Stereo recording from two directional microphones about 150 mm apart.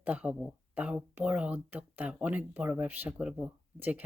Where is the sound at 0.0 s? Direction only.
10° right (ahead or behind).